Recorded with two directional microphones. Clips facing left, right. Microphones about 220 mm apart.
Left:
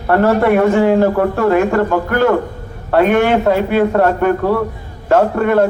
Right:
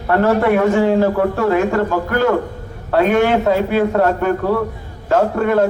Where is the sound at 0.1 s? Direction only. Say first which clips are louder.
Left 2 dB; 50° left (ahead or behind).